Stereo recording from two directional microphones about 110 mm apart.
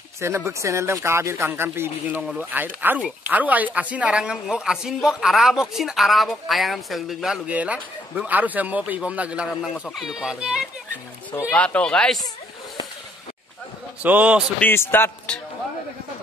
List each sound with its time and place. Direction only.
0.2 s a child's voice: 25° right (ahead or behind)
11.5 s speech: 10° left (ahead or behind)
14.0 s speech: 15° right (ahead or behind)
14.6 s a man's voice: 20° left (ahead or behind)